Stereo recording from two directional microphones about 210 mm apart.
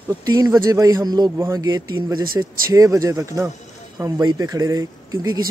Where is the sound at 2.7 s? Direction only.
15° right (ahead or behind).